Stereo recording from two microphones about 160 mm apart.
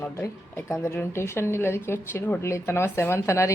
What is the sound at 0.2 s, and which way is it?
A woman's voice, 15° left (ahead or behind).